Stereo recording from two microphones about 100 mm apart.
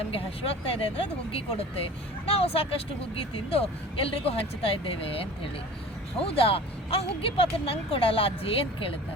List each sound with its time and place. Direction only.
0.1 s speech: 70° left (ahead or behind)
6.1 s speech: 70° left (ahead or behind)